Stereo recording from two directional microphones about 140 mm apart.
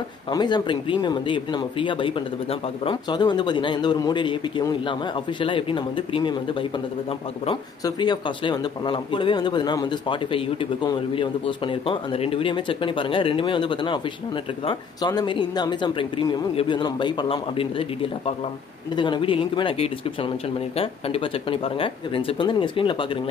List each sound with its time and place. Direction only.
0.3 s speech: 30° left (ahead or behind)
7.8 s speech: 30° left (ahead or behind)